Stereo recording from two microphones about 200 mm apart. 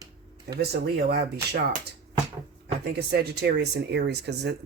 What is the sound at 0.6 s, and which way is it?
Speech, 55° right (ahead or behind).